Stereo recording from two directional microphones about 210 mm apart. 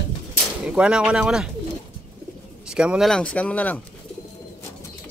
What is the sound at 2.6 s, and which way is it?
Speech, 5° right (ahead or behind).